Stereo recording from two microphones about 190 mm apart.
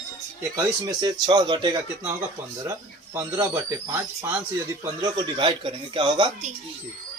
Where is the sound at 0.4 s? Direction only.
15° right (ahead or behind).